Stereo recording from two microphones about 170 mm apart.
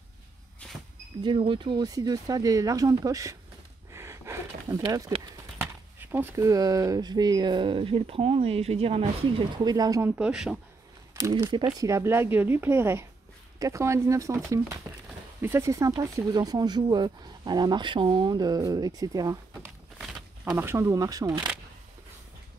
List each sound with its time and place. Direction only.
1.2 s speech: 30° right (ahead or behind)
3.9 s a sound: 15° right (ahead or behind)
4.8 s speech: 20° right (ahead or behind)
9.7 s speech: 20° right (ahead or behind)
10.1 s speech: 5° right (ahead or behind)
11.1 s speech: 25° right (ahead or behind)